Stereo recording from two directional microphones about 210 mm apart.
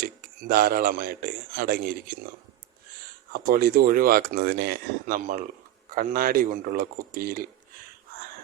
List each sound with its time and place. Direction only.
0.0 s a man's voice: 45° right (ahead or behind)
3.3 s speech: 45° right (ahead or behind)